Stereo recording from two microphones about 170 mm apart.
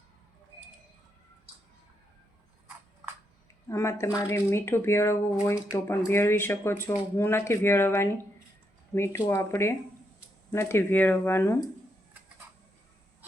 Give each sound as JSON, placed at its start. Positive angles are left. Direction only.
{"t": 3.7, "sound": "speech", "side_deg": 15}